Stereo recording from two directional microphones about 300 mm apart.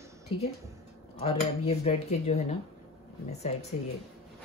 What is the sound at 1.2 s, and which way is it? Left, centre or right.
Speech, left.